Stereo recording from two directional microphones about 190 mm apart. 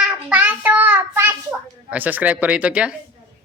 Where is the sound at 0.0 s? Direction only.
5° right (ahead or behind).